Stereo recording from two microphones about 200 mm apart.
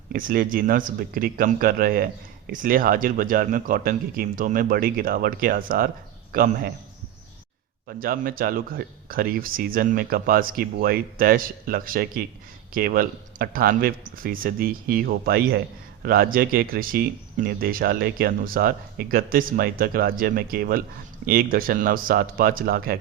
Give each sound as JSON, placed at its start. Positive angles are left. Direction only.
{"t": 0.1, "sound": "speech", "side_deg": -45}
{"t": 7.9, "sound": "speech", "side_deg": -45}